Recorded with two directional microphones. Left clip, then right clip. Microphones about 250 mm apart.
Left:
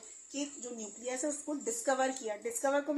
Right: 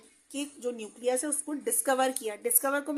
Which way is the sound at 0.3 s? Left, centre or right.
Right.